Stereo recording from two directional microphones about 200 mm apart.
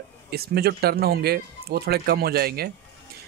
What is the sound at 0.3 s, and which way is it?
Speech, 50° right (ahead or behind).